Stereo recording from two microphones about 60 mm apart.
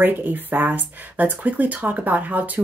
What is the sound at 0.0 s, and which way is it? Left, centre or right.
A woman's voice, right.